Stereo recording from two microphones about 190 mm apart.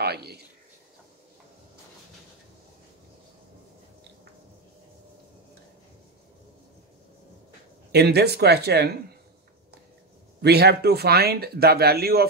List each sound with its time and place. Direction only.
0.0 s a sound: 60° right (ahead or behind)
7.9 s speech: 60° right (ahead or behind)
10.4 s speech: 55° right (ahead or behind)